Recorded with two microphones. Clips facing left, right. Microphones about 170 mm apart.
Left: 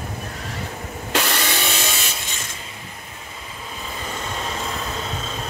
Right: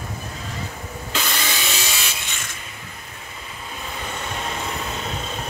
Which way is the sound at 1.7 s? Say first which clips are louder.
Left 2 dB; 50° left (ahead or behind).